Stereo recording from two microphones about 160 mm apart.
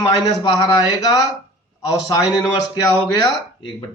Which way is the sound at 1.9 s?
25° left (ahead or behind).